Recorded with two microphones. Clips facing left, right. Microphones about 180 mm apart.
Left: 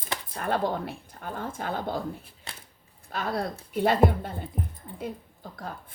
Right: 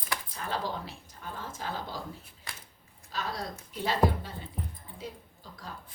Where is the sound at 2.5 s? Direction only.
25° left (ahead or behind).